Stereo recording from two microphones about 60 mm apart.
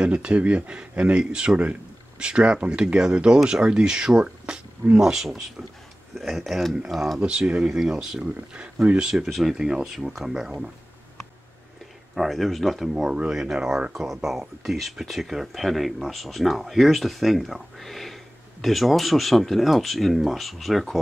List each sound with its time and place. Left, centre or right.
0.0 s speech: centre
7.2 s speech: centre
12.2 s speech: centre